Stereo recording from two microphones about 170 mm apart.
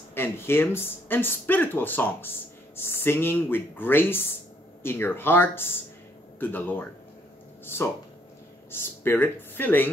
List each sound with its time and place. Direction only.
0.1 s speech: 15° left (ahead or behind)